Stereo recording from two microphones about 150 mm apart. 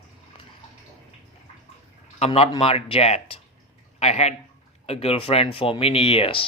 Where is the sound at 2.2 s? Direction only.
40° left (ahead or behind).